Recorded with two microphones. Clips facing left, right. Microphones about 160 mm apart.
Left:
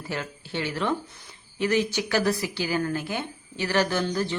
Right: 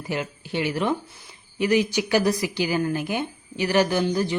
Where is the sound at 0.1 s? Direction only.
15° right (ahead or behind).